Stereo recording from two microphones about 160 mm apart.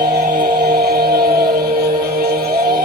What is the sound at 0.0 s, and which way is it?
Music, 70° right (ahead or behind).